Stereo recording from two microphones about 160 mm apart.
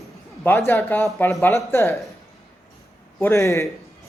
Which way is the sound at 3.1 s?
15° left (ahead or behind).